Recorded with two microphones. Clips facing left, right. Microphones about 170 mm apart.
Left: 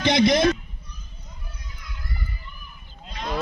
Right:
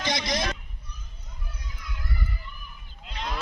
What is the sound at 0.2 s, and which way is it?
Speech, 55° left (ahead or behind).